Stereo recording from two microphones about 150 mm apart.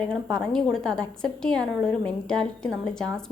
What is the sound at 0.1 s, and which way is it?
A woman's voice, 5° left (ahead or behind).